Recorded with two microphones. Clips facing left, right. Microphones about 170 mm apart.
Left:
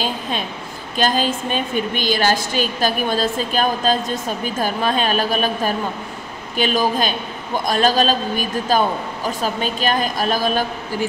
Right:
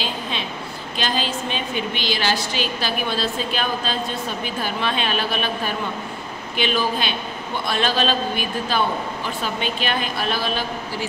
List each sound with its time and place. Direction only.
0.0 s a woman's voice: 45° left (ahead or behind)